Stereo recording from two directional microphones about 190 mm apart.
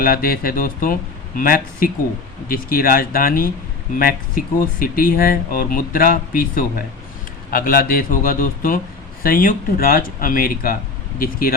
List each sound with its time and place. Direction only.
0.0 s speech: 50° left (ahead or behind)